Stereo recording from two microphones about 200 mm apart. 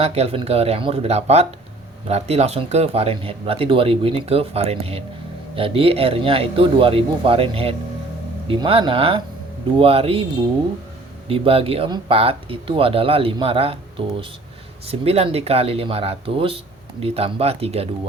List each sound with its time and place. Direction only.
0.0 s speech: 30° right (ahead or behind)
11.3 s speech: 30° right (ahead or behind)
14.8 s speech: 30° right (ahead or behind)